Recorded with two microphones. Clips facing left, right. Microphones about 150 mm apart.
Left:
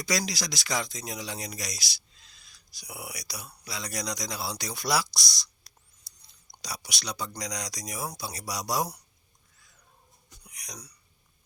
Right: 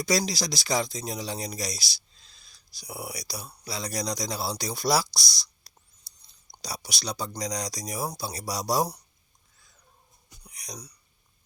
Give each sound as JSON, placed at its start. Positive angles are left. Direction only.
{"t": 0.1, "sound": "speech", "side_deg": -30}
{"t": 5.7, "sound": "whispering", "side_deg": -35}
{"t": 6.5, "sound": "speech", "side_deg": -30}
{"t": 10.4, "sound": "a sound", "side_deg": -30}